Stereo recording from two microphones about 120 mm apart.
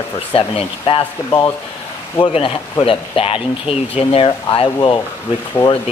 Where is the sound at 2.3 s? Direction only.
50° left (ahead or behind).